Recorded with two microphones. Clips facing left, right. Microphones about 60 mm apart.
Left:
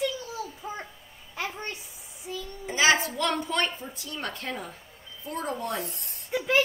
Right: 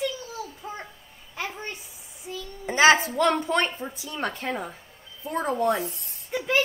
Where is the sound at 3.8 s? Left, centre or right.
Right.